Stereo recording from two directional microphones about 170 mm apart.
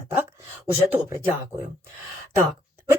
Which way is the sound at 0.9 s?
15° right (ahead or behind).